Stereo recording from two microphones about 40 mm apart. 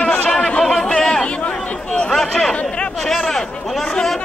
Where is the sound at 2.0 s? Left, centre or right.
Centre.